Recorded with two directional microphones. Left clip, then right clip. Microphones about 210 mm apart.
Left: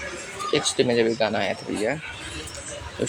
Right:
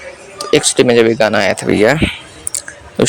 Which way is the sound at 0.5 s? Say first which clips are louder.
Right 12 dB; 50° right (ahead or behind).